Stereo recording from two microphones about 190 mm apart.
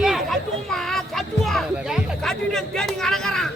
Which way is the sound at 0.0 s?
Centre (ahead or behind).